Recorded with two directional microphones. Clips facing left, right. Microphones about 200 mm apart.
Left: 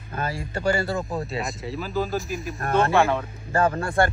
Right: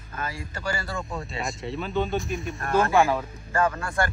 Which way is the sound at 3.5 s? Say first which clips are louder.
Left 3 dB; 30° left (ahead or behind).